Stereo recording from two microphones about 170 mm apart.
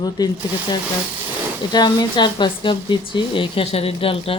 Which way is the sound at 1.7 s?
25° left (ahead or behind).